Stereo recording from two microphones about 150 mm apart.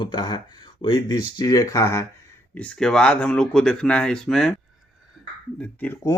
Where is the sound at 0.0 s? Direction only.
30° left (ahead or behind).